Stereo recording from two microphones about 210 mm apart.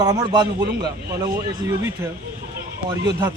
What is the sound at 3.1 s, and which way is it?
Speech, 10° right (ahead or behind).